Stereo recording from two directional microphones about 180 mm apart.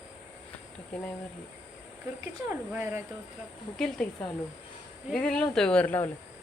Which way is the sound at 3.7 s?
5° left (ahead or behind).